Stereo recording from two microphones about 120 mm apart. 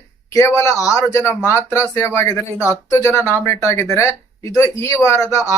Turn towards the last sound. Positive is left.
turn(degrees=25)  # may be behind; listen again after turning